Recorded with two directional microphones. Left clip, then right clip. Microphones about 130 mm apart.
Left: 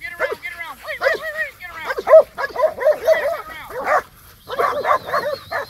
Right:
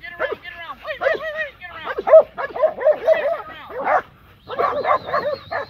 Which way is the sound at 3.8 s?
25° left (ahead or behind).